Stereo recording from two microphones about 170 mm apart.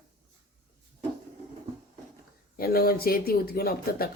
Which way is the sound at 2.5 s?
65° left (ahead or behind).